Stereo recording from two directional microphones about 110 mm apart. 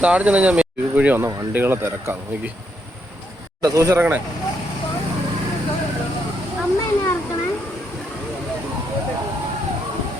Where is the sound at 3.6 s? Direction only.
30° right (ahead or behind).